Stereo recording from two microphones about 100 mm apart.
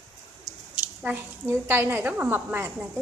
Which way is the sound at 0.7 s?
15° right (ahead or behind).